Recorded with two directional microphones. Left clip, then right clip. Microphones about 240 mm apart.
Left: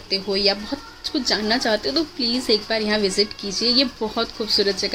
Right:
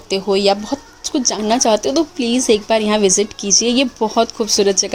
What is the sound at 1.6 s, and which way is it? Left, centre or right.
Speech, right.